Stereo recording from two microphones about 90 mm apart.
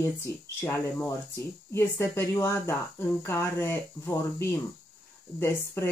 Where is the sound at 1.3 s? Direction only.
30° left (ahead or behind).